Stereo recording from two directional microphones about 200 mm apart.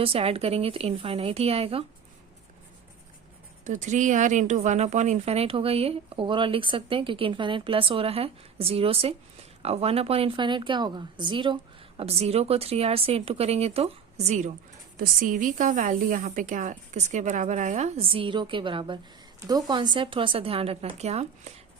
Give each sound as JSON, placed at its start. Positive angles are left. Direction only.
{"t": 0.0, "sound": "speech", "side_deg": -30}
{"t": 3.6, "sound": "a woman's voice", "side_deg": -35}